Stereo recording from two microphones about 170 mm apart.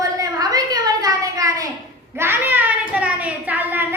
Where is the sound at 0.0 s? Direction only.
20° right (ahead or behind).